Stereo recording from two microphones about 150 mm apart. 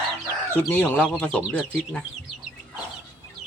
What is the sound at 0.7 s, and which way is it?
Speech, 10° left (ahead or behind).